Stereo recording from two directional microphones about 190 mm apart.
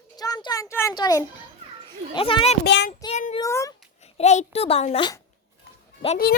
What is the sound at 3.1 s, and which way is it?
Speech, 40° left (ahead or behind).